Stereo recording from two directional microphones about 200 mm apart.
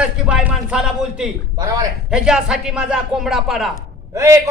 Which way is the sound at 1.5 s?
20° right (ahead or behind).